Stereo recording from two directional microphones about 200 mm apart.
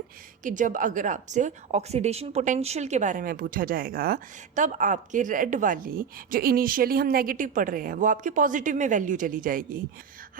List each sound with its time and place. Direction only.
0.4 s a woman's voice: 40° right (ahead or behind)